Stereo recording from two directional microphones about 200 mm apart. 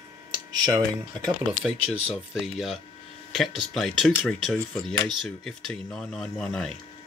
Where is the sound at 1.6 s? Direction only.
Centre (ahead or behind).